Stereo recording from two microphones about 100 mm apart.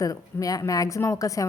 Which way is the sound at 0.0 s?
35° left (ahead or behind).